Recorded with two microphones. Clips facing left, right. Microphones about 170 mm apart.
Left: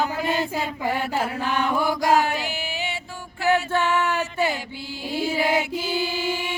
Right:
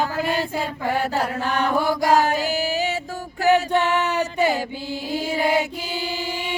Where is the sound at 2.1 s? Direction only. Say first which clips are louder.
Right 4 dB; 40° right (ahead or behind).